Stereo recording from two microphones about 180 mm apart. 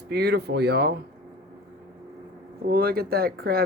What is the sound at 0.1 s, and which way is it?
Speech, 65° right (ahead or behind).